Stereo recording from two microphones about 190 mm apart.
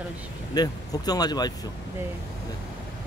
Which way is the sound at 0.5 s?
20° left (ahead or behind).